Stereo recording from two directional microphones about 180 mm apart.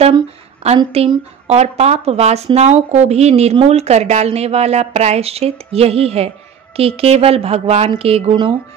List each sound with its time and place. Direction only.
0.7 s speech: 35° right (ahead or behind)